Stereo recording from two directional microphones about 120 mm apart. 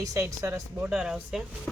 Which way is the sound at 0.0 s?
25° right (ahead or behind).